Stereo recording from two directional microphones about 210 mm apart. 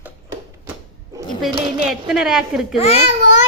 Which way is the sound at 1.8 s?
Centre (ahead or behind).